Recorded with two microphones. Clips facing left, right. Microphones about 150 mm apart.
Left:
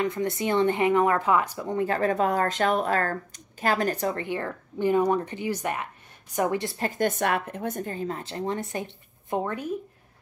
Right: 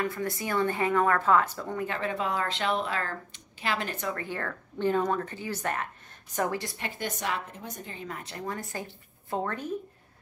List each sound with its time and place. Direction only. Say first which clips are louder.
0.0 s speech: left 5 dB; 20° left (ahead or behind)
1.9 s speech: left 8 dB; 40° left (ahead or behind)
4.2 s speech: left 4 dB; 20° left (ahead or behind)
6.8 s a woman's voice: left 9 dB; 50° left (ahead or behind)
8.1 s speech: left 6 dB; 30° left (ahead or behind); by 9.7 s 15° left (ahead or behind)